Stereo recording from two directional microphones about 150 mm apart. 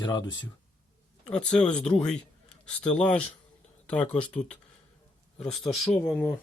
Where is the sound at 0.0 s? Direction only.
30° left (ahead or behind).